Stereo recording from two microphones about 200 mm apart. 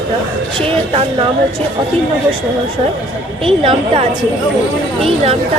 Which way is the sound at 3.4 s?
30° right (ahead or behind).